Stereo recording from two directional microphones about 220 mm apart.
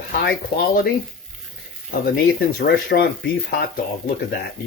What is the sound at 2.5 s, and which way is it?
Speech, 45° left (ahead or behind).